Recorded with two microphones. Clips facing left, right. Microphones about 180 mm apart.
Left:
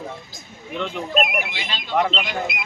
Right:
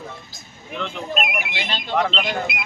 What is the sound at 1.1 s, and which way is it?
Speech, 45° left (ahead or behind).